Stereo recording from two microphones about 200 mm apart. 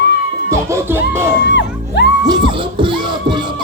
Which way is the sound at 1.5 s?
60° left (ahead or behind).